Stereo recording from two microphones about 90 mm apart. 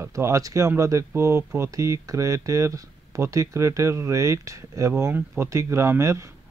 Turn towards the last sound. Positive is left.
turn(degrees=-35)  # may be behind; listen again after turning